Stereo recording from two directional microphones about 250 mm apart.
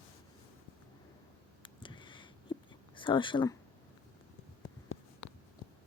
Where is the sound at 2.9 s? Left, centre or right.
Centre.